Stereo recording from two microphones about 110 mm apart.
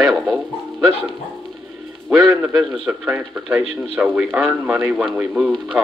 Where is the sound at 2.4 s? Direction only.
15° right (ahead or behind).